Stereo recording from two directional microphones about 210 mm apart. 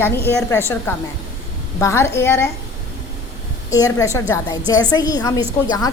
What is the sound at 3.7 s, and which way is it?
A woman's voice, 15° left (ahead or behind).